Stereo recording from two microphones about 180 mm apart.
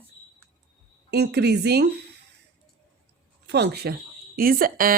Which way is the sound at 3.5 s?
65° right (ahead or behind).